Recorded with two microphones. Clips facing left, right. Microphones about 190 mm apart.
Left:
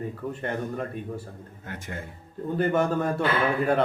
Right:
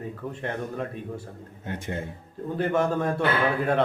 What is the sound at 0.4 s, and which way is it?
Speech, centre (ahead or behind).